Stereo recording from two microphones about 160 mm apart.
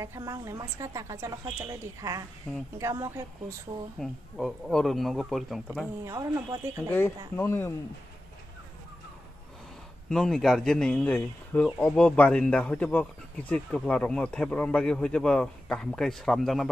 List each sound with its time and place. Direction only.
0.0 s a woman's voice: 20° right (ahead or behind)
2.4 s speech: 10° left (ahead or behind)
2.8 s a woman's voice: 20° right (ahead or behind)
4.0 s a man's voice: centre (ahead or behind)
6.0 s a woman's voice: 20° right (ahead or behind)
7.3 s speech: 15° left (ahead or behind)
10.0 s a man's voice: 5° left (ahead or behind)